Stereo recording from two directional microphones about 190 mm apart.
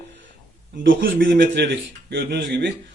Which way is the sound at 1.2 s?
65° right (ahead or behind).